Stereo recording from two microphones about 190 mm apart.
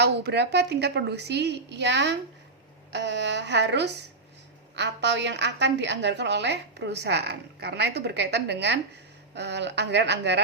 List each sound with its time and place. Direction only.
0.0 s a woman's voice: 60° right (ahead or behind)